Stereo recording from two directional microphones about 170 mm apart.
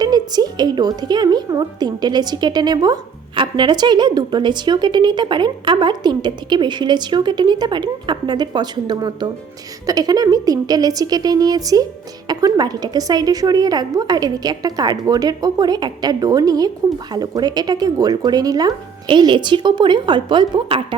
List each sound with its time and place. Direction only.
0.0 s a woman's voice: 25° right (ahead or behind)